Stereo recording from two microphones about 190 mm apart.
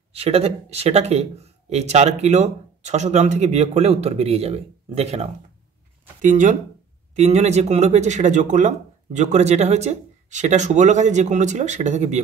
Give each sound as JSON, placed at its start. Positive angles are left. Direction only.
{"t": 0.1, "sound": "speech", "side_deg": -35}